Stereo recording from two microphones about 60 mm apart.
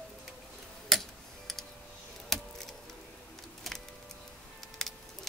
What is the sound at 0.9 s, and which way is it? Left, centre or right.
Tick-tock, centre.